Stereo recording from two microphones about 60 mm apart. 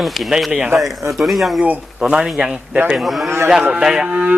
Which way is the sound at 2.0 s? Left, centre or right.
Centre.